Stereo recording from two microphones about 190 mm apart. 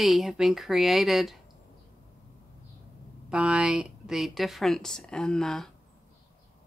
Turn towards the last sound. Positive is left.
turn(degrees=0)  # may be behind; listen again after turning